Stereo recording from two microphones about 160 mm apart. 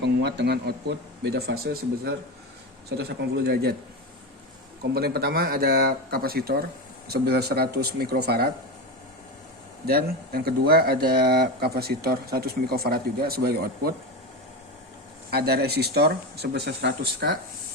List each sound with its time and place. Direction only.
0.0 s speech: 90° right
4.8 s speech: 80° right
9.8 s speech: 75° right (ahead or behind)
15.3 s speech: 75° right (ahead or behind)